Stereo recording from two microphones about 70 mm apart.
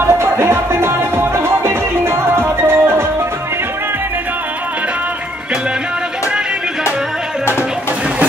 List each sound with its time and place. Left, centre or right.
0.0 s music: right